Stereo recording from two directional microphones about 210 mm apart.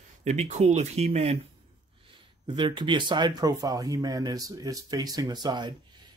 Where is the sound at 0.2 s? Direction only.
35° right (ahead or behind).